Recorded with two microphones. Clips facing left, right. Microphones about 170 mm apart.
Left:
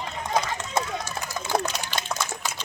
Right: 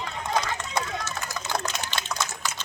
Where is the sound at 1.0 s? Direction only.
10° left (ahead or behind).